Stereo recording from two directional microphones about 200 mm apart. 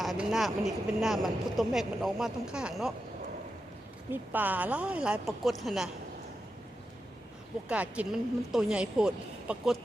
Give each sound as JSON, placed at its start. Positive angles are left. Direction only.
{"t": 0.0, "sound": "speech", "side_deg": 0}
{"t": 4.1, "sound": "speech", "side_deg": -10}
{"t": 7.7, "sound": "speech", "side_deg": -5}